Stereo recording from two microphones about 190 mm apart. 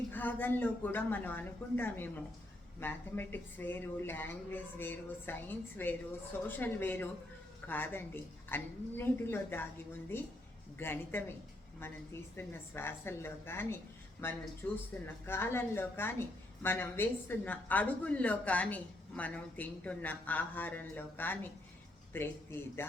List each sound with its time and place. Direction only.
0.1 s a woman's voice: 10° left (ahead or behind)
10.8 s a woman's voice: 10° left (ahead or behind)
12.4 s a woman's voice: 10° left (ahead or behind)